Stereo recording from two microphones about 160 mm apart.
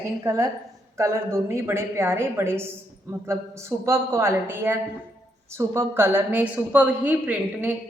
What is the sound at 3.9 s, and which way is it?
A woman's voice, 15° right (ahead or behind).